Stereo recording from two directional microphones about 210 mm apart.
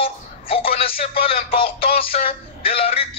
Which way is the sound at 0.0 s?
25° left (ahead or behind).